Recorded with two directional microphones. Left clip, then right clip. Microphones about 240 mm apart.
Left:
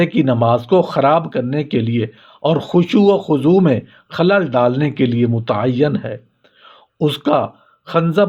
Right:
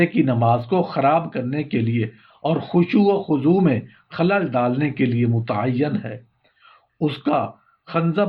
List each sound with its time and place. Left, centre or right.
0.0 s speech: left
6.7 s a sound: left
7.9 s speech: left